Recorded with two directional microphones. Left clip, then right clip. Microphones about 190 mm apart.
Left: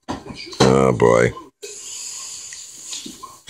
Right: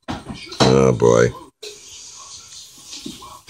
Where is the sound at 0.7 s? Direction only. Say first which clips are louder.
Right 1 dB; 15° left (ahead or behind).